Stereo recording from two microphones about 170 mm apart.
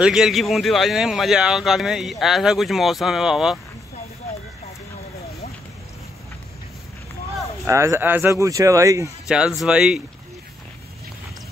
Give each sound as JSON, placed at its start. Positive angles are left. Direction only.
{"t": 0.0, "sound": "speech", "side_deg": 0}
{"t": 7.6, "sound": "speech", "side_deg": -15}
{"t": 9.6, "sound": "speech", "side_deg": -5}